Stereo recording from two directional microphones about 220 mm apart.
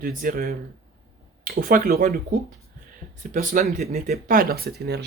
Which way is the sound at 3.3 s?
40° right (ahead or behind).